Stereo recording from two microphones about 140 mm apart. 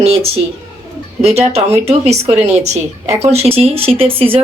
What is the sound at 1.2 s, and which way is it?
A woman's voice, 50° right (ahead or behind).